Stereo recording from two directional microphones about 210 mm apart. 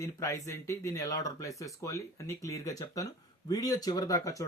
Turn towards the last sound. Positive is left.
turn(degrees=15)  # may be behind; listen again after turning